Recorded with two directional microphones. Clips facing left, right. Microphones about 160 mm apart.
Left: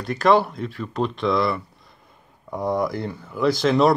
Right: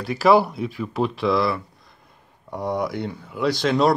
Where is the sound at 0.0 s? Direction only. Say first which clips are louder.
Right 1 dB; 5° right (ahead or behind).